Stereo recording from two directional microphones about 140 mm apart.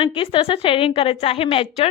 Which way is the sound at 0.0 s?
40° left (ahead or behind).